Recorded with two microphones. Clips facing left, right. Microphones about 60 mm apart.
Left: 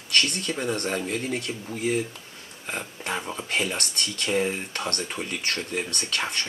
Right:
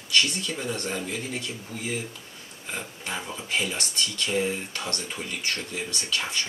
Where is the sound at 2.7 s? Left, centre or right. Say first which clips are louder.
Left 3 dB; left.